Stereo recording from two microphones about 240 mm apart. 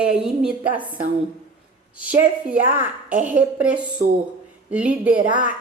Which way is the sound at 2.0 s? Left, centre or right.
Centre.